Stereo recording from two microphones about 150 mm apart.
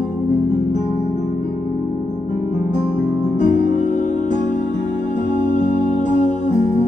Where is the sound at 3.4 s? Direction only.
55° left (ahead or behind).